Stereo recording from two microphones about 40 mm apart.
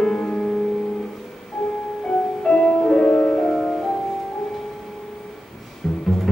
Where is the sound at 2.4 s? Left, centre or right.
Centre.